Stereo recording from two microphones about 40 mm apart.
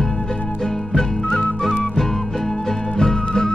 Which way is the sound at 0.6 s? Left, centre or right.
Centre.